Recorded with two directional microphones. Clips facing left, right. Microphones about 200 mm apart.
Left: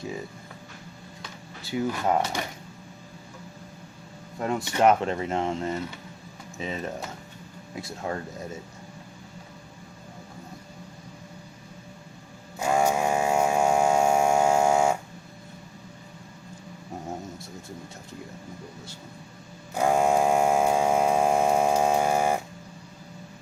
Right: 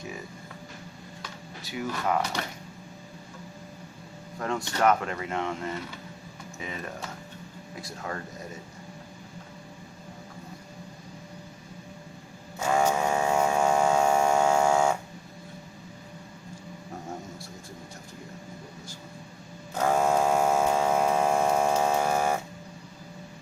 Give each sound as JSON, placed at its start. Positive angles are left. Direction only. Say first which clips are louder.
{"t": 1.6, "sound": "speech", "louder": "left 6 dB", "side_deg": 30}
{"t": 2.4, "sound": "a sound", "louder": "left 2 dB", "side_deg": 15}
{"t": 4.4, "sound": "speech", "louder": "left 3 dB", "side_deg": 20}
{"t": 12.5, "sound": "mains hum", "louder": "left 1 dB", "side_deg": 10}
{"t": 19.7, "sound": "hum", "louder": "left 2 dB", "side_deg": 10}